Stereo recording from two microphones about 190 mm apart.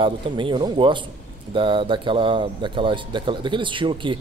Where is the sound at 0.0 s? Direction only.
25° right (ahead or behind).